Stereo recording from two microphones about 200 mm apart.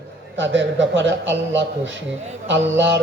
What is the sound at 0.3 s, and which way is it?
A man's voice, 65° right (ahead or behind).